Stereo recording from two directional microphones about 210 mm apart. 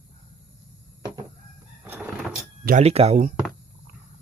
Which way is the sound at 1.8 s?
10° right (ahead or behind).